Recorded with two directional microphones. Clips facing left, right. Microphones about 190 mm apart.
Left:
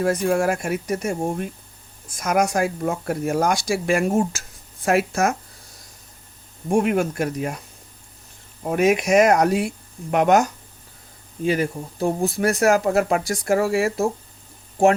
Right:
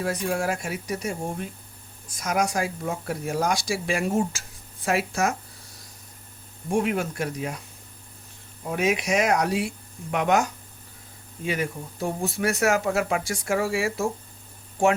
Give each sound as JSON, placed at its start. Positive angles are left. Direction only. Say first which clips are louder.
{"t": 0.0, "sound": "speech", "louder": "left 6 dB", "side_deg": 50}
{"t": 6.7, "sound": "speech", "louder": "left 5 dB", "side_deg": 45}
{"t": 8.6, "sound": "speech", "louder": "left 6 dB", "side_deg": 50}
{"t": 11.4, "sound": "speech", "louder": "left 6 dB", "side_deg": 35}